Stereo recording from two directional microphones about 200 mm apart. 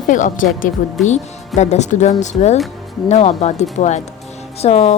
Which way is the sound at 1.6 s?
35° left (ahead or behind).